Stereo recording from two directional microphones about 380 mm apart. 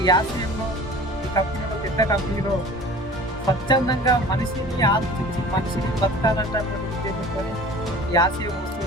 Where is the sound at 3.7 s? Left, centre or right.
Centre.